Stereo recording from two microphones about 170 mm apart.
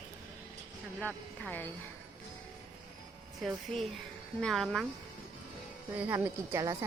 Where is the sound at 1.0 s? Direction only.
10° left (ahead or behind).